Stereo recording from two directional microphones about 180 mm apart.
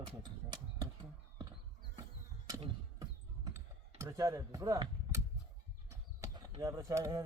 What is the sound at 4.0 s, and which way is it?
Speech, 15° right (ahead or behind).